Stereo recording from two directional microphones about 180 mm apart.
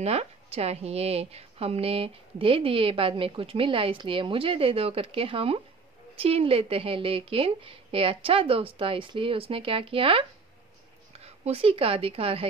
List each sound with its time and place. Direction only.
0.0 s a woman's voice: 35° right (ahead or behind)